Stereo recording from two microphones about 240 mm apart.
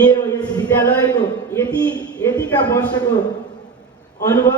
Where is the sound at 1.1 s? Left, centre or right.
Centre.